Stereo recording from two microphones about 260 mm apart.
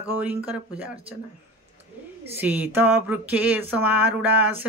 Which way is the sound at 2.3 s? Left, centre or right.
Centre.